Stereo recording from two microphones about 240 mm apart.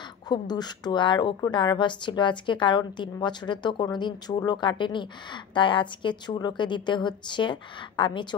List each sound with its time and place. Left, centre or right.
0.3 s a woman's voice: centre